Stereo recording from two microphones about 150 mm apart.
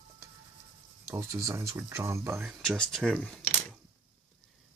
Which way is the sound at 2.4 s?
Centre (ahead or behind).